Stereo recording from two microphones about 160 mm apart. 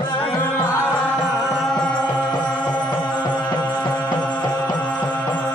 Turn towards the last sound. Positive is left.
turn(degrees=10)  # may be behind; listen again after turning